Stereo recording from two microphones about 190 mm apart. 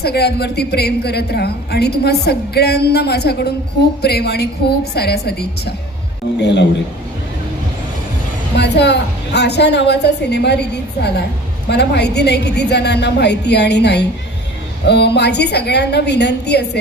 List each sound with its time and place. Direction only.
0.0 s a woman's voice: 60° left (ahead or behind)
8.5 s a woman's voice: 60° left (ahead or behind)